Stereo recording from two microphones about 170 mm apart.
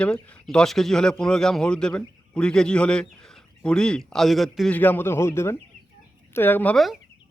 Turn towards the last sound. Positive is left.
turn(degrees=0)  # may be behind; listen again after turning